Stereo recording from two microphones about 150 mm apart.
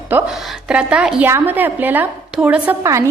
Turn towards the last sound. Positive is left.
turn(degrees=-20)  # may be behind; listen again after turning